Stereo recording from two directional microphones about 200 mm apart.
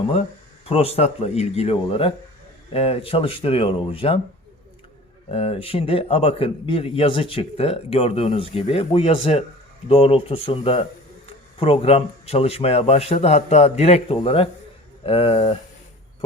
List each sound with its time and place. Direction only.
0.6 s a man's voice: 30° left (ahead or behind)
5.3 s a man's voice: 30° left (ahead or behind)